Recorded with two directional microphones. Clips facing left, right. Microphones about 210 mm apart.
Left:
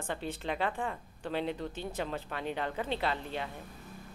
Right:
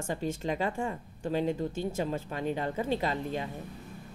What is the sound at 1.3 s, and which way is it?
Speech, 40° right (ahead or behind).